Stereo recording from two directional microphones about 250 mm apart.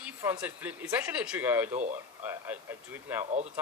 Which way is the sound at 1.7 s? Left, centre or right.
Right.